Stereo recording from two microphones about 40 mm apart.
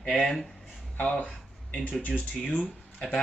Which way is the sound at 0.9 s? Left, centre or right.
Left.